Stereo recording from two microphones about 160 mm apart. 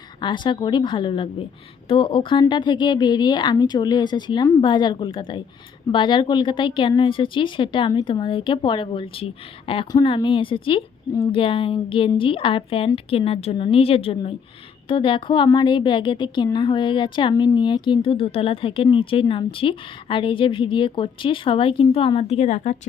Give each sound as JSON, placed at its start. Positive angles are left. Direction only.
{"t": 0.2, "sound": "speech", "side_deg": 30}